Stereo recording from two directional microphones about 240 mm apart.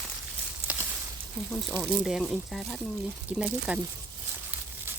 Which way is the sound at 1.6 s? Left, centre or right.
Centre.